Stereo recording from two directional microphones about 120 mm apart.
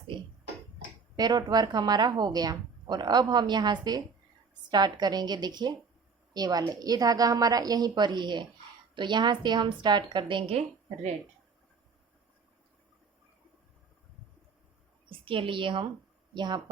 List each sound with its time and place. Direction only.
1.1 s a woman's voice: 35° right (ahead or behind)
15.2 s a woman's voice: 45° right (ahead or behind)